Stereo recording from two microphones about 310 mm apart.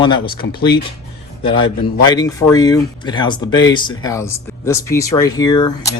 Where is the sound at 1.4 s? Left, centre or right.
Centre.